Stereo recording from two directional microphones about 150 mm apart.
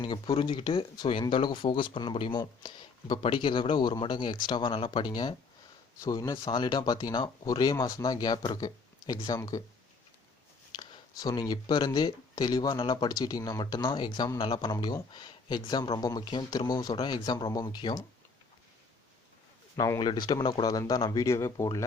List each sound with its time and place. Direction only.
0.0 s speech: 30° left (ahead or behind)
10.8 s speech: 25° left (ahead or behind)
19.7 s speech: 25° left (ahead or behind)